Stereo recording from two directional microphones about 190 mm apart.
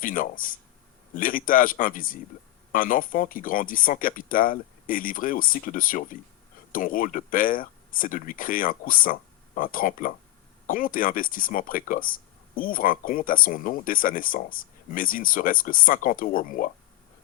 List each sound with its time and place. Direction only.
0.0 s speech: 45° left (ahead or behind)